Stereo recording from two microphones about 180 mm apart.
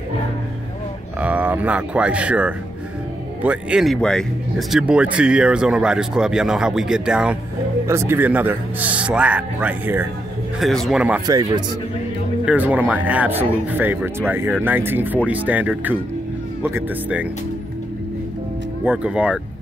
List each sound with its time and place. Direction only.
1.2 s speech: 10° right (ahead or behind)
7.8 s a man's voice: 15° right (ahead or behind)
11.2 s speech: 20° right (ahead or behind)
12.4 s a man's voice: 10° right (ahead or behind)
18.9 s a man's voice: 5° right (ahead or behind)